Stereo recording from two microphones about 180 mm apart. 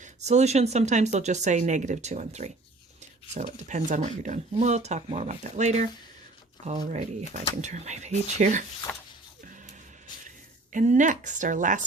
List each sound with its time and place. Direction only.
0.0 s speech: 40° right (ahead or behind)
8.9 s a sound: 10° left (ahead or behind)
10.2 s speech: 45° right (ahead or behind)